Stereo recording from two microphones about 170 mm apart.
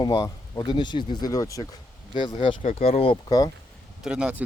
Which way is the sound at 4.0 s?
5° right (ahead or behind).